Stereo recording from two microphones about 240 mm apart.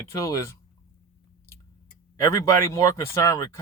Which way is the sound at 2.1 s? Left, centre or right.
Centre.